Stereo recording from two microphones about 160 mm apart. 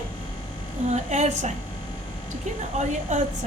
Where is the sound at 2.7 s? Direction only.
45° right (ahead or behind).